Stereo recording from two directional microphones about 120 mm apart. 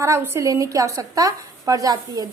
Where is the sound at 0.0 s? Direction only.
20° right (ahead or behind).